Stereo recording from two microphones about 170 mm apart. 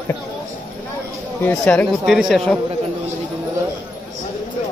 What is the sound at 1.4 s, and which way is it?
Speech, 10° left (ahead or behind).